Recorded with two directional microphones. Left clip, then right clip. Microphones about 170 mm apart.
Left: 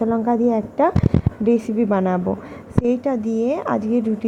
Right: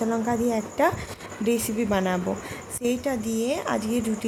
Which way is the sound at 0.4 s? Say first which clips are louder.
Left 4 dB; 15° left (ahead or behind).